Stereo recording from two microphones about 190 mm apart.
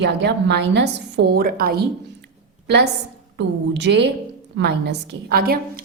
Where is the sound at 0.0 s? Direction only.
65° right (ahead or behind).